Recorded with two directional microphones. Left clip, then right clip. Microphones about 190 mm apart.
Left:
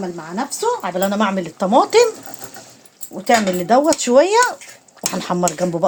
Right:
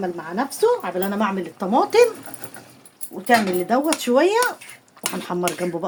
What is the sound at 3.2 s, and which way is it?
Speech, 45° left (ahead or behind).